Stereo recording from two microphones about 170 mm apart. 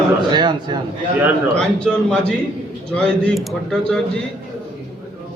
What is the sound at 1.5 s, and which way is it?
A man's voice, 5° left (ahead or behind).